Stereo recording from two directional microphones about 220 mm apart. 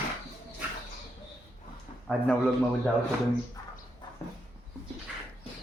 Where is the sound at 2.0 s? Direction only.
5° left (ahead or behind).